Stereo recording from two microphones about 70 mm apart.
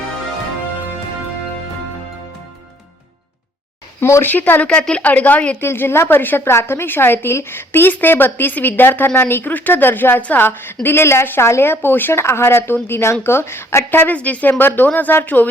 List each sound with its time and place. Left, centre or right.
4.0 s speech: left
4.3 s speech: left
4.7 s a woman's voice: centre
5.5 s a woman's voice: left